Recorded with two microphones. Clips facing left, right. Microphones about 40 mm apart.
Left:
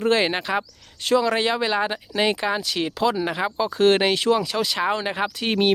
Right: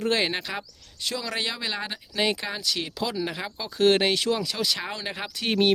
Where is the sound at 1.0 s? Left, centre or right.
Left.